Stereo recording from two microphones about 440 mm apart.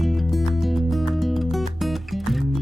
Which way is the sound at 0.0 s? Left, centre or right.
Centre.